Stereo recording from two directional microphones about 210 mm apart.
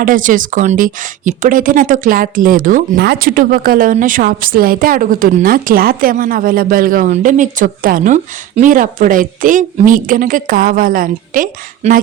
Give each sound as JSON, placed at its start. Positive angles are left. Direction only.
{"t": 0.0, "sound": "a woman's voice", "side_deg": -40}